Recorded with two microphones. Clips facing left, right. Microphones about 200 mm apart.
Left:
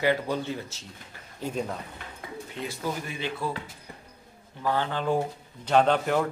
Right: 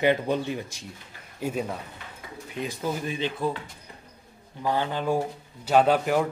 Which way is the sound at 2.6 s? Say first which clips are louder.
Right 3 dB; 15° right (ahead or behind).